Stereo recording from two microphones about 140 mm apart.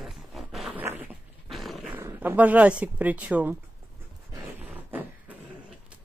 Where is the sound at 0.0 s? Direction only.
Centre (ahead or behind).